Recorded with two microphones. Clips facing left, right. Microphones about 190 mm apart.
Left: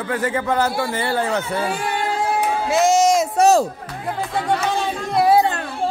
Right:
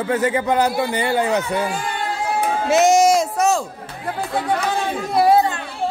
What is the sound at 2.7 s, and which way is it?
Speech, 20° right (ahead or behind).